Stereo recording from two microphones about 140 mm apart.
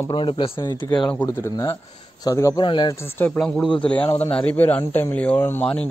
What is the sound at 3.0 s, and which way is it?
Speech, 15° left (ahead or behind).